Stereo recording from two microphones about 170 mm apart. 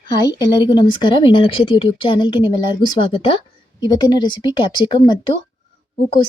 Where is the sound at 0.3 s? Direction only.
25° left (ahead or behind).